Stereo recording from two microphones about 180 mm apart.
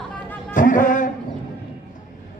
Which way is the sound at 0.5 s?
45° left (ahead or behind).